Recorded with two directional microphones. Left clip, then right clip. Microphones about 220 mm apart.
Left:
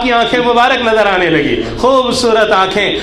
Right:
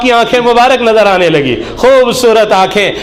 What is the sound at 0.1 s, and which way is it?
A man's voice, 45° right (ahead or behind).